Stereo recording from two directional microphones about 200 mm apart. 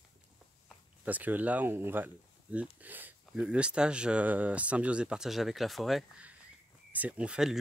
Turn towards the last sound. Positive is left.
turn(degrees=-5)  # may be behind; listen again after turning